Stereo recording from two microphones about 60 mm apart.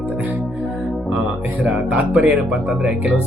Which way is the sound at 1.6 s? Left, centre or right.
Right.